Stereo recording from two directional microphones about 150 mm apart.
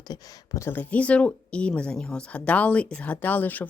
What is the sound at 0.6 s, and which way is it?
Speech, 10° left (ahead or behind).